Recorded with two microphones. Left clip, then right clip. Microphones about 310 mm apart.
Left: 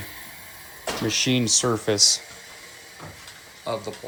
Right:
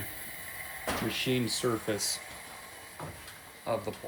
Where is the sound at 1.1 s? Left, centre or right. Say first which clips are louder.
Left 11 dB; centre.